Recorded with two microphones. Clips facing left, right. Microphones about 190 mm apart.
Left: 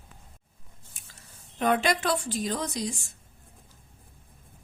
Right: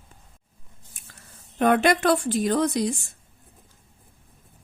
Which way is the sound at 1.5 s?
60° right (ahead or behind).